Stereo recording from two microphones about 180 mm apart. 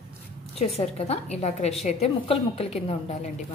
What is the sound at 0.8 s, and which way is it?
A woman's voice, 35° left (ahead or behind).